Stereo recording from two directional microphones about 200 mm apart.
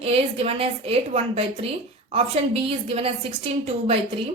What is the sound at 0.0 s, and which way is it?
A woman's voice, 30° right (ahead or behind).